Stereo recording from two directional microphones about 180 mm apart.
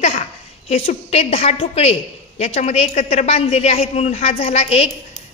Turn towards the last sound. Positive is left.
turn(degrees=35)  # may be behind; listen again after turning